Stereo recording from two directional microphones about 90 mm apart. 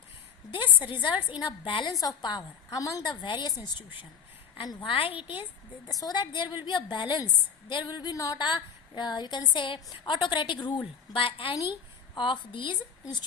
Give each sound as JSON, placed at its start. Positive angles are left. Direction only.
{"t": 0.5, "sound": "a woman's voice", "side_deg": 60}
{"t": 1.9, "sound": "a woman's voice", "side_deg": 45}
{"t": 3.2, "sound": "a woman's voice", "side_deg": 55}
{"t": 4.8, "sound": "a woman's voice", "side_deg": 85}
{"t": 5.9, "sound": "a woman's voice", "side_deg": 45}
{"t": 8.4, "sound": "a woman's voice", "side_deg": 55}
{"t": 11.1, "sound": "a woman's voice", "side_deg": 75}
{"t": 11.7, "sound": "a woman's voice", "side_deg": 60}